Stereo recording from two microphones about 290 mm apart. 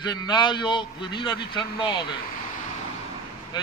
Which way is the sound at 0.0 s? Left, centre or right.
Centre.